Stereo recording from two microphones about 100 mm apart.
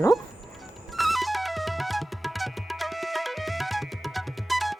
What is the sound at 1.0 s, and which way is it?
Music, centre (ahead or behind).